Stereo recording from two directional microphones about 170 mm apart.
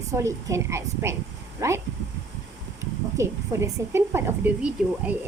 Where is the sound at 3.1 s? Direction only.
15° right (ahead or behind).